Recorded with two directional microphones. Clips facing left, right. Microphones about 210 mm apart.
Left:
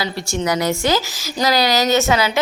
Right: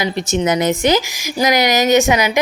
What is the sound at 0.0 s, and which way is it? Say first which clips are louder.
Speech: right 4 dB; 20° right (ahead or behind).